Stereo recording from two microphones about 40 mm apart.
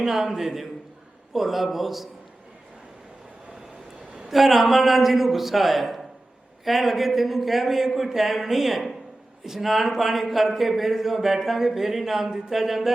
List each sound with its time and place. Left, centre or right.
0.0 s a man's voice: centre
4.3 s speech: centre